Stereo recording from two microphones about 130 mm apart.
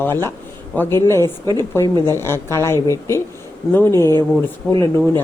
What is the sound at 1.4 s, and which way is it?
Speech, 30° right (ahead or behind).